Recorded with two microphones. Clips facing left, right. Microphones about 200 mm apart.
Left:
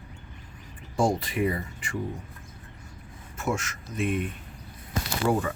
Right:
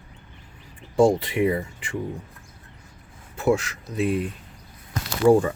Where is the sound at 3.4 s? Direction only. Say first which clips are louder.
Right 8 dB; 35° right (ahead or behind).